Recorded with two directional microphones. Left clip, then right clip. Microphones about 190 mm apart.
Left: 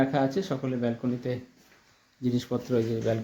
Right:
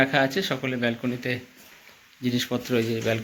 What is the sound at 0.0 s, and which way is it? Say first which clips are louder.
Speech: right 4 dB; 10° left (ahead or behind).